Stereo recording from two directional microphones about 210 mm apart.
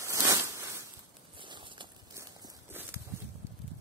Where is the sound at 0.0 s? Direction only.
15° right (ahead or behind).